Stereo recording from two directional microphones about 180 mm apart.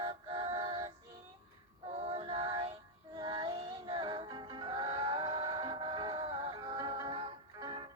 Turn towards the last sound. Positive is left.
turn(degrees=-30)  # may be behind; listen again after turning